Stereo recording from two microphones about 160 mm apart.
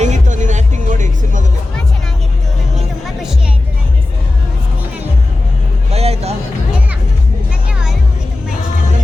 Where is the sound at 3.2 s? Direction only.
5° right (ahead or behind).